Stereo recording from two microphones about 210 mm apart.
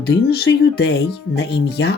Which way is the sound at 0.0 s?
50° left (ahead or behind).